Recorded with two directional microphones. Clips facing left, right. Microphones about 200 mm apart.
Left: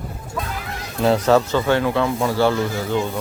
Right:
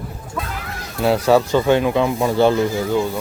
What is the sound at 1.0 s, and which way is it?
Speech, 10° right (ahead or behind).